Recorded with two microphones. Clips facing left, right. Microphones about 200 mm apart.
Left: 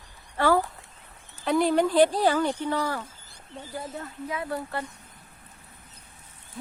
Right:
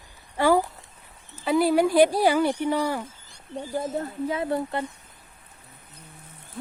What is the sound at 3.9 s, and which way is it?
Speech, 30° right (ahead or behind).